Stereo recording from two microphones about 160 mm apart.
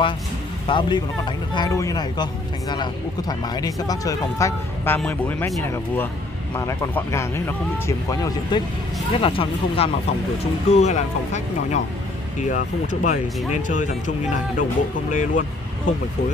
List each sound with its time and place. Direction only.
0.7 s speech: 30° left (ahead or behind)
9.1 s speech: 35° left (ahead or behind); by 15.4 s 55° left (ahead or behind)